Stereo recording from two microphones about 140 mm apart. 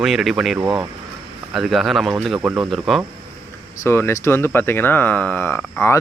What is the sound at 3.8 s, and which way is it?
Speech, 20° left (ahead or behind).